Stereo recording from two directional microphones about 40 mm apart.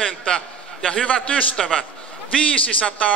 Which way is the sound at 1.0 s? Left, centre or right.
Left.